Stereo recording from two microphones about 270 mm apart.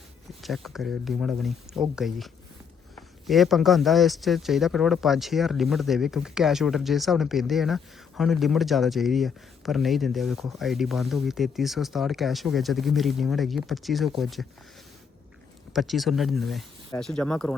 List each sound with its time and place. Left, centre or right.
0.4 s speech: centre
15.7 s speech: centre